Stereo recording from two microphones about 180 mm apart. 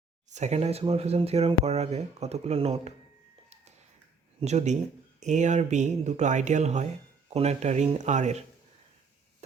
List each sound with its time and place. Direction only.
0.3 s speech: 40° right (ahead or behind)
4.4 s speech: 40° right (ahead or behind)